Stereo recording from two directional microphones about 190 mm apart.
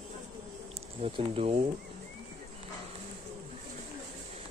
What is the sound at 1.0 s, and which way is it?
Speech, 30° right (ahead or behind).